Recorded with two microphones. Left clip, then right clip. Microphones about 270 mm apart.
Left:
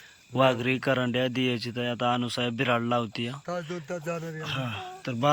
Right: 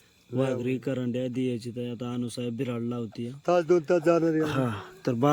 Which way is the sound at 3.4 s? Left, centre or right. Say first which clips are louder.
Right 11 dB; right.